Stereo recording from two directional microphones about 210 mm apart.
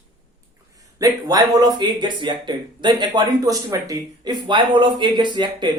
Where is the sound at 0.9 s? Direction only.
15° right (ahead or behind).